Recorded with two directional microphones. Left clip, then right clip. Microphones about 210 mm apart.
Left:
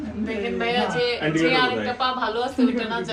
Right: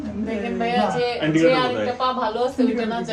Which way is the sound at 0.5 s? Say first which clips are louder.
Right 2 dB; 45° right (ahead or behind).